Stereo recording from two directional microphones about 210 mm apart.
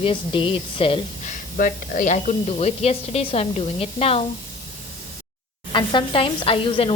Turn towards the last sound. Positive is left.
turn(degrees=25)  # may be behind; listen again after turning